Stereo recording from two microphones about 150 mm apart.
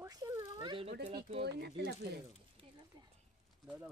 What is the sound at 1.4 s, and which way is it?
Speech, 90° right.